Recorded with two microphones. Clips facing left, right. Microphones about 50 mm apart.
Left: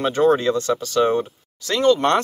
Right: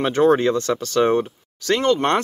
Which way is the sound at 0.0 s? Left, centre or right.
Right.